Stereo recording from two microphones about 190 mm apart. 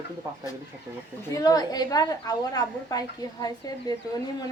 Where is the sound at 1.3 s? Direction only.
20° left (ahead or behind).